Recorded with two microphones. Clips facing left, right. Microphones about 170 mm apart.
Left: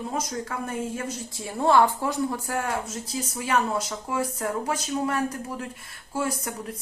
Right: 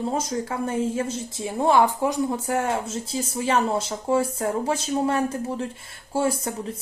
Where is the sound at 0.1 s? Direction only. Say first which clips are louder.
Right 4 dB; 25° right (ahead or behind).